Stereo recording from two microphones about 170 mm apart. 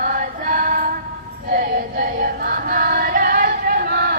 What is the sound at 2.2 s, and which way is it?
Choir, 60° right (ahead or behind).